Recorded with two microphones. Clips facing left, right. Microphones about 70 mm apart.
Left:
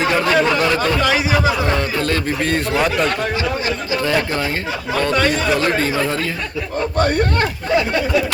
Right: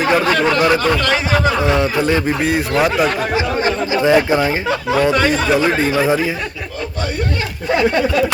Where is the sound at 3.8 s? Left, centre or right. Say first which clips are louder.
Right 7 dB; centre.